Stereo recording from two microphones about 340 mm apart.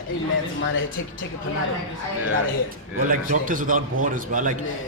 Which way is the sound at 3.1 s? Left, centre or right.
Right.